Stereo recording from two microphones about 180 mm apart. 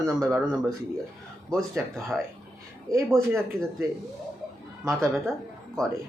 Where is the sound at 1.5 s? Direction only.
Centre (ahead or behind).